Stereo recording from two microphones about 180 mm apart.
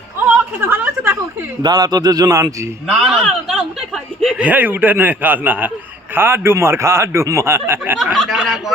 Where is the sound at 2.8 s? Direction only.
Centre (ahead or behind).